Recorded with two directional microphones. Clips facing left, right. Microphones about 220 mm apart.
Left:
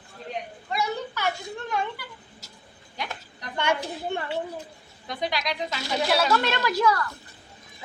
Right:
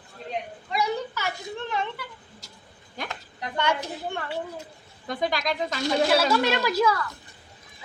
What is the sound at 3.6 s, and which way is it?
Speech, 15° left (ahead or behind).